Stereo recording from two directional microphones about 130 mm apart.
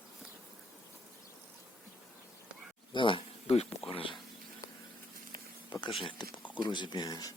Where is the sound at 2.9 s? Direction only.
40° left (ahead or behind).